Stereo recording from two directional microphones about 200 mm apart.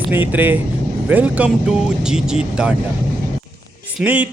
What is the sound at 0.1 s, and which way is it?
A man's voice, 10° right (ahead or behind).